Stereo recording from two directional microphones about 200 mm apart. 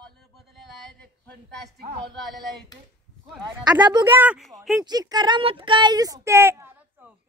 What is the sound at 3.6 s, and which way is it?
Speech, 20° right (ahead or behind).